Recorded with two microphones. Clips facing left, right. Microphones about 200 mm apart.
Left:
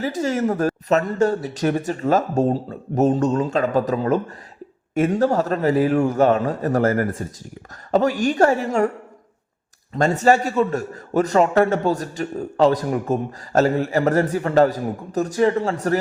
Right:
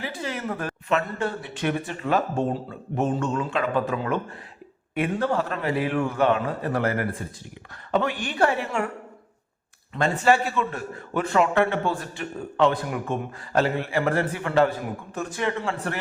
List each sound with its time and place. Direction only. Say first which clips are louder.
0.0 s a man's voice: left 10 dB; 45° left (ahead or behind)
9.9 s a man's voice: left 4 dB; 40° left (ahead or behind)